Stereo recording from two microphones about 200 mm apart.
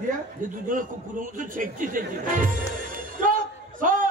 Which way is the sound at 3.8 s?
40° right (ahead or behind).